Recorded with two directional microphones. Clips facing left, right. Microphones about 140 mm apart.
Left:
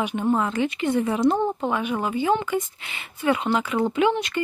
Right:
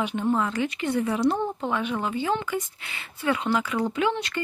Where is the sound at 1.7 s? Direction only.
10° left (ahead or behind).